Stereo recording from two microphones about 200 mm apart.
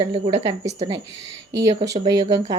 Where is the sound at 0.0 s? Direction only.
30° right (ahead or behind).